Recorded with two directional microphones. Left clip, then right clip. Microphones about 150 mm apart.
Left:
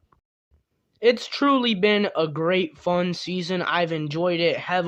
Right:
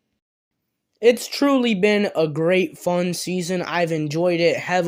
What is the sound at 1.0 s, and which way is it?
Speech, 25° right (ahead or behind).